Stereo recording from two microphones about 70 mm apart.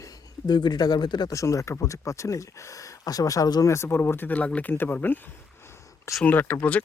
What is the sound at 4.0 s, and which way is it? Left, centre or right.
Speech, left.